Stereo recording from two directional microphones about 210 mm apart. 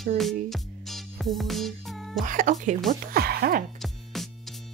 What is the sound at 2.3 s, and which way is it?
Speech, 40° right (ahead or behind).